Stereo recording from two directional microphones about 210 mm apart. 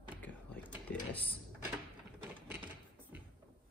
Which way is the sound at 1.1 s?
5° left (ahead or behind).